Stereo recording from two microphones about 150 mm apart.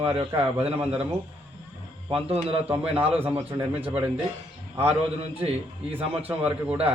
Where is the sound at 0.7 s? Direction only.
10° right (ahead or behind).